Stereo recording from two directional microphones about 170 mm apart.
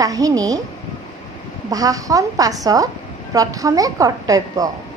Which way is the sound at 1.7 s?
20° right (ahead or behind).